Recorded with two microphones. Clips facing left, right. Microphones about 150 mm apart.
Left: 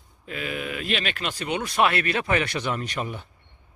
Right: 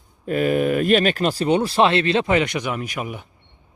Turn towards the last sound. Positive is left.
turn(degrees=-10)  # may be behind; listen again after turning